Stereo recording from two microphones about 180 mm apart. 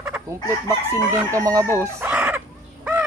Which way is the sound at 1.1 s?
15° right (ahead or behind).